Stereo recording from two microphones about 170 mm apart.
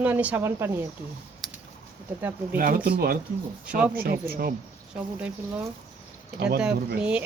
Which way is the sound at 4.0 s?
60° right (ahead or behind).